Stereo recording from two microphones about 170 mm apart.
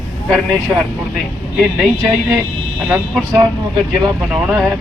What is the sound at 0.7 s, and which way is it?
Speech, 15° right (ahead or behind).